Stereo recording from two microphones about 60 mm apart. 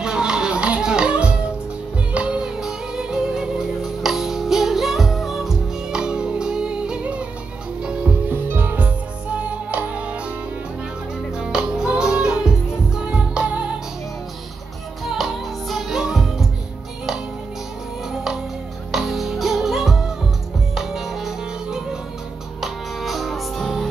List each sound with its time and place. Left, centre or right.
0.0 s music: centre
8.3 s music: right
11.3 s music: centre
15.0 s music: centre
18.1 s music: centre